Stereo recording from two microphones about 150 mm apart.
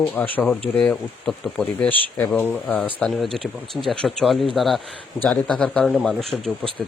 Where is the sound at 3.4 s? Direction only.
35° right (ahead or behind).